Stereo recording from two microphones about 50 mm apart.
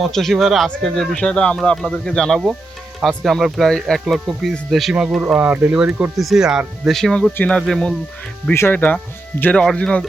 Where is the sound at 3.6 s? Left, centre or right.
Centre.